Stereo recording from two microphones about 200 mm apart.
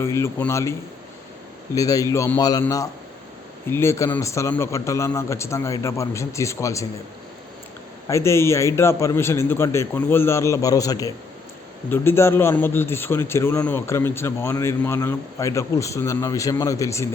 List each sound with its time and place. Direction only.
0.0 s a man's voice: 15° left (ahead or behind)
8.0 s a man's voice: 15° left (ahead or behind)